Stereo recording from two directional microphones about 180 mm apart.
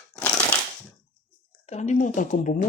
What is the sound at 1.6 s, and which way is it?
Speech, 40° left (ahead or behind).